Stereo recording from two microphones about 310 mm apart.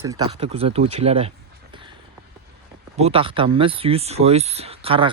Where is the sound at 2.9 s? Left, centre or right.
Centre.